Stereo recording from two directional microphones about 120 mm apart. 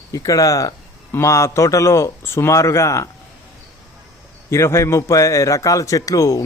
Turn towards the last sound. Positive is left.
turn(degrees=25)  # may be behind; listen again after turning